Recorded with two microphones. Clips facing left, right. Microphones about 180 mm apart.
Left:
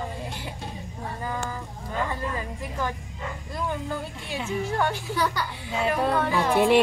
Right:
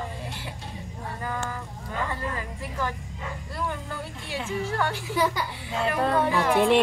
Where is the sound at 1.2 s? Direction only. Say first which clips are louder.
Even; 15° left (ahead or behind).